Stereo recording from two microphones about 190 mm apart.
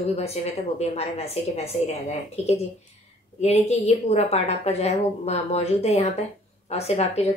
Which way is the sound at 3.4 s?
35° left (ahead or behind).